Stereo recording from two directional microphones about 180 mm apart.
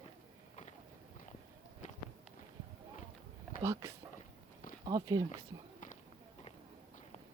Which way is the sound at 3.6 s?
15° right (ahead or behind).